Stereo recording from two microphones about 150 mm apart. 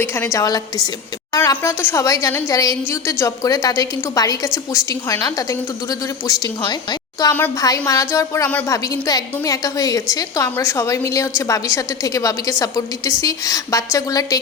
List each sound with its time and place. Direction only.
0.0 s a woman's voice: 15° left (ahead or behind)